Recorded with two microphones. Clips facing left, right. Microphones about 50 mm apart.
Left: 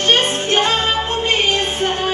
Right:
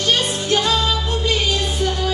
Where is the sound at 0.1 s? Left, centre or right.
Left.